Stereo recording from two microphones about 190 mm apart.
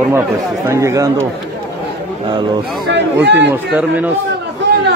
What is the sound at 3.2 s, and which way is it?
Speech, 65° right (ahead or behind).